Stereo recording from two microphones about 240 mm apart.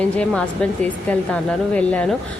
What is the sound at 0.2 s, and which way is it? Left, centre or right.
Speech, centre.